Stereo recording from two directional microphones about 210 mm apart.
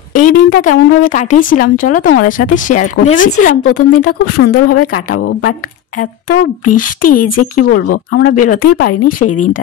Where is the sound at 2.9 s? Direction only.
65° left (ahead or behind).